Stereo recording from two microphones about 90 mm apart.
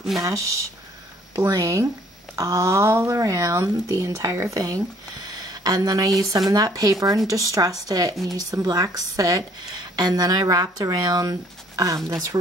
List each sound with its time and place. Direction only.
1.3 s speech: 40° right (ahead or behind)